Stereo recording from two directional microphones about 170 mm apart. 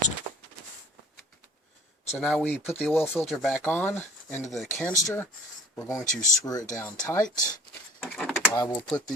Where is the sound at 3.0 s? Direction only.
Centre (ahead or behind); by 6.8 s 20° left (ahead or behind).